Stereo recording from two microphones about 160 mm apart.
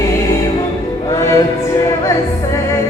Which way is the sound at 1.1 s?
20° left (ahead or behind).